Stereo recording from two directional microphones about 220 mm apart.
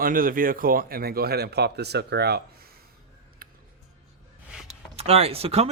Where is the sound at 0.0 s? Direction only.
40° right (ahead or behind).